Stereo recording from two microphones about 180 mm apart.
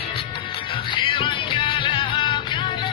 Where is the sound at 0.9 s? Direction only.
30° left (ahead or behind).